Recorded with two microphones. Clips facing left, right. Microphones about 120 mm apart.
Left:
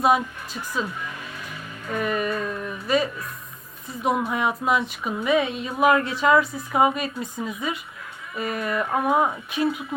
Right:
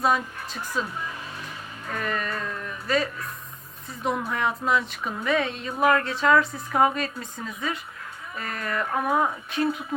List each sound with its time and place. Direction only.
0.0 s speech: 10° left (ahead or behind)
1.9 s speech: 10° left (ahead or behind)